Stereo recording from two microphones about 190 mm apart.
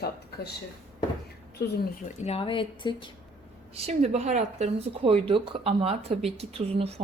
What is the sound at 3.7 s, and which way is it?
A woman's voice, 35° right (ahead or behind).